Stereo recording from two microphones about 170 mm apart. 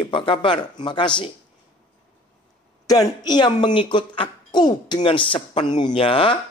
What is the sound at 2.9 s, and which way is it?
Speech, 25° left (ahead or behind).